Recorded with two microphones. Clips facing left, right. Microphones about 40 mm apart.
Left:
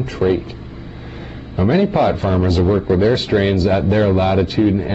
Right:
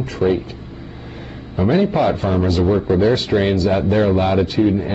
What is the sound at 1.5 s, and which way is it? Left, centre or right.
A man's voice, centre.